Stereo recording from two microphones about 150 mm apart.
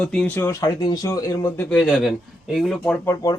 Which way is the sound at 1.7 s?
Centre (ahead or behind).